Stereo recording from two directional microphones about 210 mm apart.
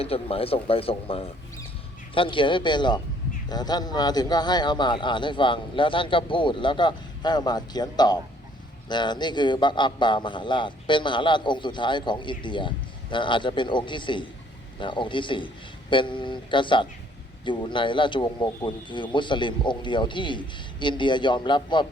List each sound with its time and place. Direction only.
0.0 s a man's voice: 25° left (ahead or behind)